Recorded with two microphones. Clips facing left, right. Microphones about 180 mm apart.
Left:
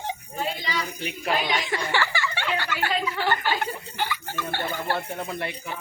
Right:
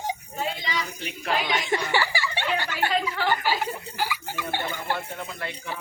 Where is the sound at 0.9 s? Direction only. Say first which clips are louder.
Left 2 dB; 10° left (ahead or behind).